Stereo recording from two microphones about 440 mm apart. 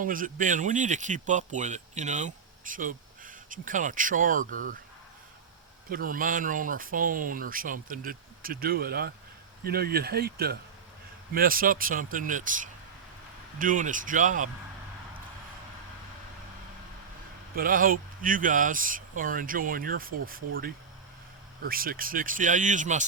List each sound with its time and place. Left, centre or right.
0.0 s speech: centre
5.9 s speech: centre
17.5 s speech: centre